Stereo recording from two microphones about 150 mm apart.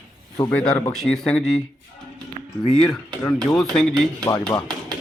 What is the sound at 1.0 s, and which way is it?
Speech, 5° left (ahead or behind).